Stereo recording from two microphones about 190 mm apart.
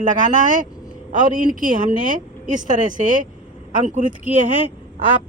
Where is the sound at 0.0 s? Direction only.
40° right (ahead or behind).